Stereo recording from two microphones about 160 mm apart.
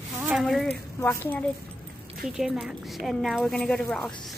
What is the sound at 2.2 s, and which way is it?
A woman's voice, 5° right (ahead or behind).